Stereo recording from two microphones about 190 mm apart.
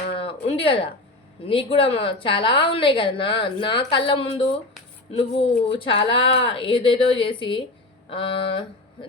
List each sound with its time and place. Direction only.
0.1 s a sound: 30° left (ahead or behind)
1.5 s a woman's voice: 30° left (ahead or behind)
5.6 s a woman's voice: 30° left (ahead or behind)